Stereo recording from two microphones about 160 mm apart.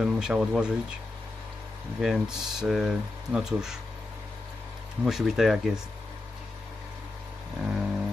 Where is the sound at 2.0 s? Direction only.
5° right (ahead or behind).